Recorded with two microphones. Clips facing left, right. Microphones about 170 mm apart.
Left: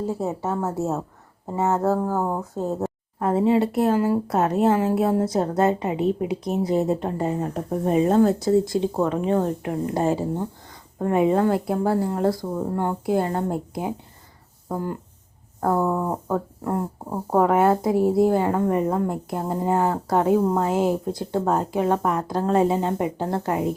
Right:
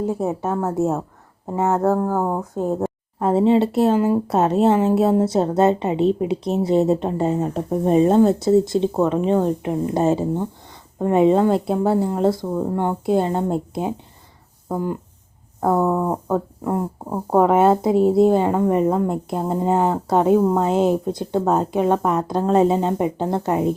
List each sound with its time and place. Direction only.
0.0 s a woman's voice: 20° right (ahead or behind)
15.7 s speech: 20° right (ahead or behind)